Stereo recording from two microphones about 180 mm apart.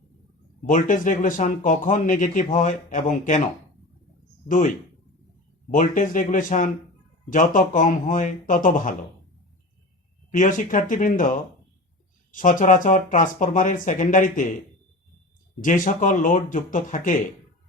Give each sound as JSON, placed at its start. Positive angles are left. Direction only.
{"t": 0.6, "sound": "speech", "side_deg": 45}
{"t": 4.4, "sound": "speech", "side_deg": 45}
{"t": 5.7, "sound": "speech", "side_deg": 45}
{"t": 10.3, "sound": "speech", "side_deg": 45}
{"t": 12.3, "sound": "speech", "side_deg": 45}
{"t": 15.6, "sound": "speech", "side_deg": 45}